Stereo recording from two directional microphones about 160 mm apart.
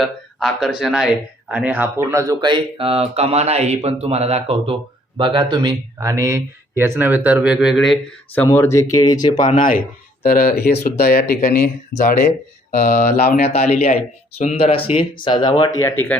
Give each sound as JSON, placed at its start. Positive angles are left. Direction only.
{"t": 0.0, "sound": "speech", "side_deg": 0}
{"t": 8.4, "sound": "speech", "side_deg": 15}
{"t": 9.6, "sound": "speech", "side_deg": 60}
{"t": 13.3, "sound": "speech", "side_deg": 45}
{"t": 15.8, "sound": "speech", "side_deg": 15}